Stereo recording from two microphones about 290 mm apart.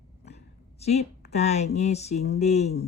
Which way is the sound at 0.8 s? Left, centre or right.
Left.